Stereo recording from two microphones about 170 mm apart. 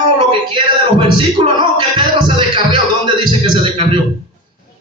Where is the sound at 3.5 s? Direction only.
30° right (ahead or behind).